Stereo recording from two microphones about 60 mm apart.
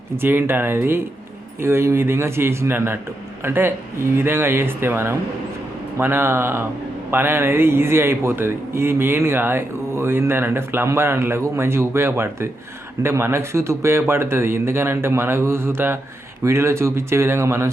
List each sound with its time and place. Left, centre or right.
0.2 s speech: right